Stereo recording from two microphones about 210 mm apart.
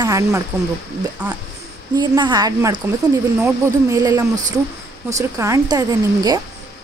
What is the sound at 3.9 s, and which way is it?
Speech, 15° right (ahead or behind).